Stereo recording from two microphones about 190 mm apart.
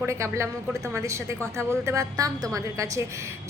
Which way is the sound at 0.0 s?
15° right (ahead or behind).